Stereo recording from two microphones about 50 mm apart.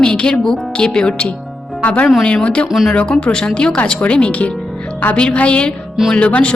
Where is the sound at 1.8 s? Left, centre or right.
Left.